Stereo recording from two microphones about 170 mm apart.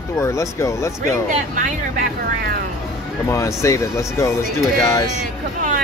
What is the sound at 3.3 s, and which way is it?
Speech, 15° left (ahead or behind).